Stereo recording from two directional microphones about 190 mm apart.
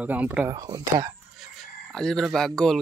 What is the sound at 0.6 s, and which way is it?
Speech, 20° right (ahead or behind).